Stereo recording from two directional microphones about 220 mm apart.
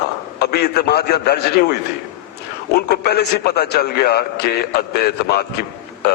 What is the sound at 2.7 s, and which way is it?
A man's voice, 45° left (ahead or behind).